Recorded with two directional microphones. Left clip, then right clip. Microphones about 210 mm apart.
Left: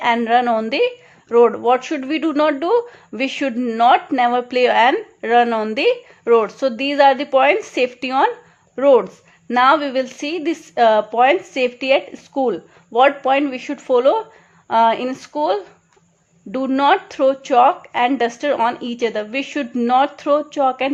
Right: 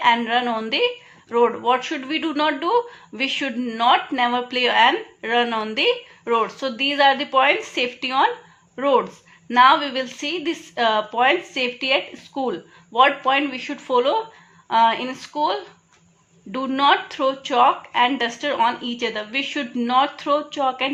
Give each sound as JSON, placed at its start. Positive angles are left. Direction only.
{"t": 0.0, "sound": "speech", "side_deg": 55}